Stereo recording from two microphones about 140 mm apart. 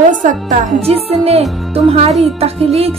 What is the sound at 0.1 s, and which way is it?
Speech, 70° right (ahead or behind).